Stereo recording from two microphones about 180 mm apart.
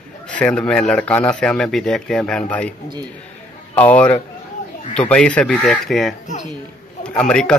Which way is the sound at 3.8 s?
10° left (ahead or behind).